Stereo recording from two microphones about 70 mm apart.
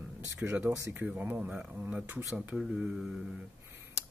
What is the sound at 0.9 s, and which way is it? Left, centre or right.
Speech, right.